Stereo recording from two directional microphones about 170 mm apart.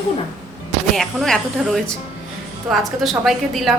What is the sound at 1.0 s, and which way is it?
A woman's voice, centre (ahead or behind).